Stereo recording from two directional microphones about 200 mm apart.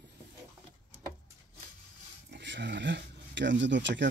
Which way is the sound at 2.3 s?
60° right (ahead or behind).